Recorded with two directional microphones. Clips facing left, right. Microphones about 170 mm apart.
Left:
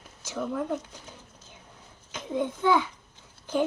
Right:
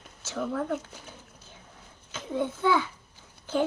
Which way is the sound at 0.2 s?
15° left (ahead or behind).